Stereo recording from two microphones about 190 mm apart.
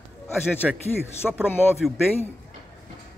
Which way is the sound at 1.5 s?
10° left (ahead or behind).